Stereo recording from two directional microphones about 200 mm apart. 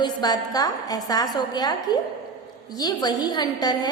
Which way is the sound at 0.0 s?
20° left (ahead or behind).